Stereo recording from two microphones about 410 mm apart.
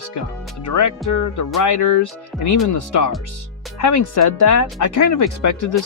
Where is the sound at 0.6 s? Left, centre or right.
Left.